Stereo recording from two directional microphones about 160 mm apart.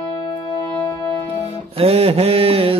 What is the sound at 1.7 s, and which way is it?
Music, 40° right (ahead or behind).